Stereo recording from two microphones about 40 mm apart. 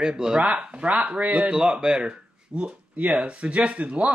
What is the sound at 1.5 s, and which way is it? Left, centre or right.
Speech, right.